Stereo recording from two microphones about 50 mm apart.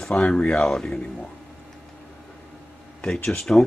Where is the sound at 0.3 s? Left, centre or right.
Centre.